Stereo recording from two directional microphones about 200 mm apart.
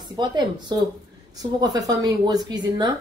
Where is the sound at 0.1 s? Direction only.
20° right (ahead or behind).